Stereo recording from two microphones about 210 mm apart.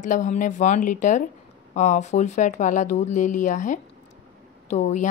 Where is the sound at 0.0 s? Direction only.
35° left (ahead or behind).